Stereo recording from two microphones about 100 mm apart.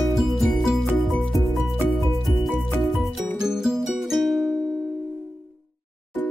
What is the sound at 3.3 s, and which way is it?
Music, 5° right (ahead or behind).